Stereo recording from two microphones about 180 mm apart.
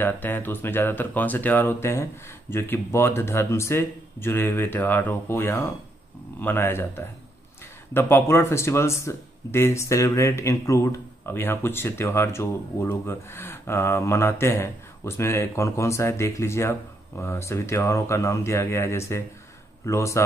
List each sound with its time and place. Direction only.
0.0 s speech: 10° left (ahead or behind)